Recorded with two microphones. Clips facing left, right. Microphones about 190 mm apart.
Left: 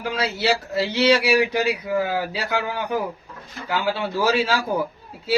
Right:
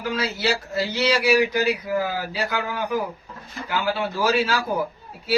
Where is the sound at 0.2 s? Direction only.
30° left (ahead or behind).